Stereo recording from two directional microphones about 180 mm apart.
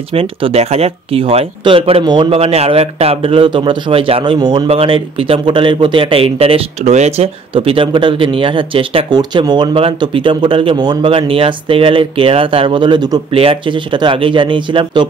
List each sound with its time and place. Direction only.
0.1 s speech: 30° right (ahead or behind)